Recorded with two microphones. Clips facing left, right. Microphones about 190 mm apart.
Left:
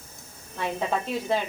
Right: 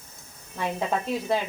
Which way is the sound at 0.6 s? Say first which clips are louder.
Even; 10° right (ahead or behind).